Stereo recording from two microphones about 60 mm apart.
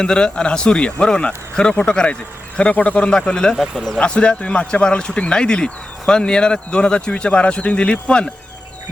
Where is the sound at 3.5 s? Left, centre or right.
Centre.